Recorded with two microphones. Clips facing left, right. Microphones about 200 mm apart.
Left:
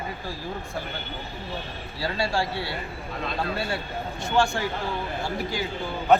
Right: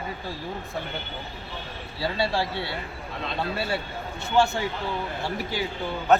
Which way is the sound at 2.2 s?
5° right (ahead or behind).